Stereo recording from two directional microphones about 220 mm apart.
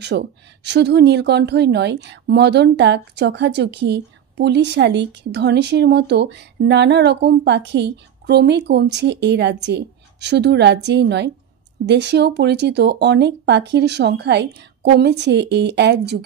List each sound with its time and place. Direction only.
0.1 s a woman's voice: 50° right (ahead or behind)